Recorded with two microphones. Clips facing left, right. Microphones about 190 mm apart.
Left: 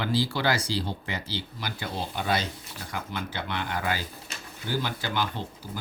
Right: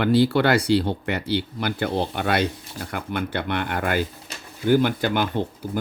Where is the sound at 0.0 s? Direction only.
60° right (ahead or behind).